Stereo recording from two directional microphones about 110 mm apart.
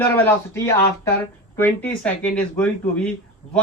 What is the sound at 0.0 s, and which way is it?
Speech, 20° left (ahead or behind).